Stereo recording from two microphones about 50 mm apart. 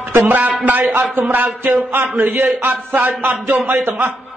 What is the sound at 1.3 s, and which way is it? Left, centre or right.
A man's voice, right.